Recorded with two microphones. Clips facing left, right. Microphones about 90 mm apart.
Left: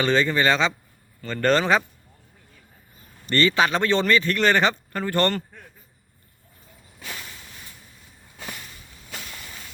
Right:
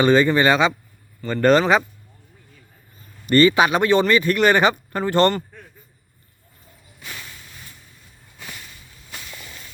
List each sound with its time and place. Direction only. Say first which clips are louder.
0.0 s speech: right 5 dB; 15° right (ahead or behind)
3.2 s speech: right 5 dB; 15° right (ahead or behind)